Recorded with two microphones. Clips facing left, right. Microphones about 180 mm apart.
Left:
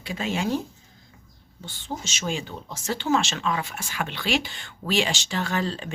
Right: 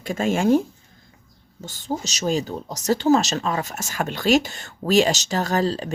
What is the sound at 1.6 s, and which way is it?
Speech, 40° right (ahead or behind).